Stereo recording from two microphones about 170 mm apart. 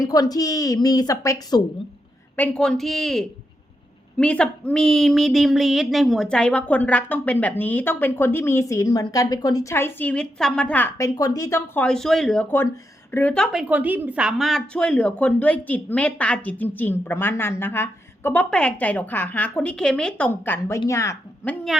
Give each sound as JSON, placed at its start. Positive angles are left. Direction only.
{"t": 0.0, "sound": "a woman's voice", "side_deg": 20}
{"t": 2.3, "sound": "a woman's voice", "side_deg": 5}